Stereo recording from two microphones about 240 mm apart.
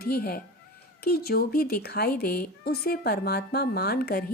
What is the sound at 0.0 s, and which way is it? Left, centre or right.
Speech, left.